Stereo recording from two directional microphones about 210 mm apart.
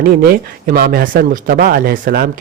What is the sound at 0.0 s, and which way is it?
Speech, 45° right (ahead or behind).